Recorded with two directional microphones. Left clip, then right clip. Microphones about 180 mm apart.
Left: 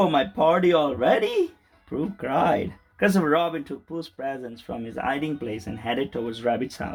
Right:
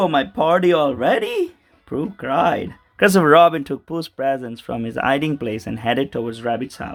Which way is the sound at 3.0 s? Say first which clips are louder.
Right 10 dB; 50° right (ahead or behind).